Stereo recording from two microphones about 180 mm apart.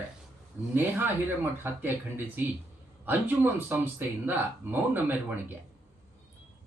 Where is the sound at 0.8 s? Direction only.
10° right (ahead or behind).